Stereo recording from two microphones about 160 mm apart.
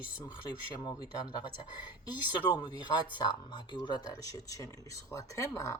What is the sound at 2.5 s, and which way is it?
Speech, 30° left (ahead or behind).